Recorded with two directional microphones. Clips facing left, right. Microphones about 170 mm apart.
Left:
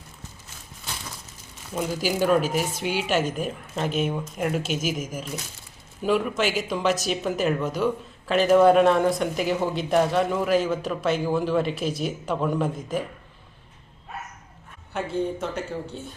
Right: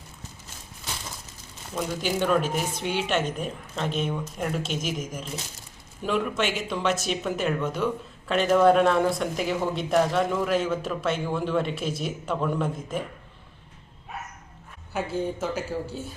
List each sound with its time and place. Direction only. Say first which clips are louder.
1.7 s speech: left 2 dB; 5° left (ahead or behind)
14.9 s speech: left 1 dB; 5° right (ahead or behind)